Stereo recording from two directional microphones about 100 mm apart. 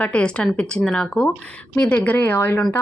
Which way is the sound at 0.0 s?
10° left (ahead or behind).